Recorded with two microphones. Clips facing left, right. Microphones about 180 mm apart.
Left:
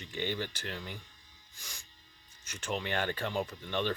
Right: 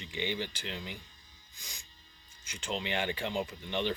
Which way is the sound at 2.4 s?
10° right (ahead or behind).